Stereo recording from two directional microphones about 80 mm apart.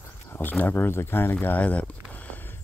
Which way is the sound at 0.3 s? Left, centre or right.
Left.